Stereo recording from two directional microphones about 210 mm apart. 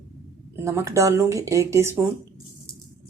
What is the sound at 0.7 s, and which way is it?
A woman's voice, 15° right (ahead or behind).